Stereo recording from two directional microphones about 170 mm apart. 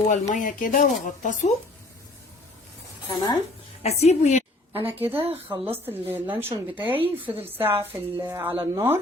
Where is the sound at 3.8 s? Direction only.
40° left (ahead or behind).